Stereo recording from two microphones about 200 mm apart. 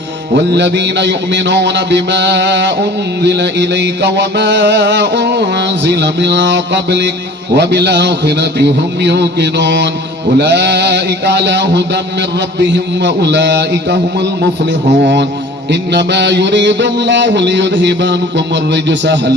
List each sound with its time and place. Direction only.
0.3 s music: 60° right (ahead or behind)